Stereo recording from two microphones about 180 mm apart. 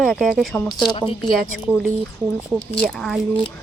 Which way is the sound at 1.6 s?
5° right (ahead or behind).